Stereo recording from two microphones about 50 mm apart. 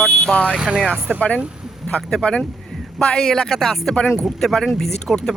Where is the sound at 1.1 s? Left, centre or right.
Centre.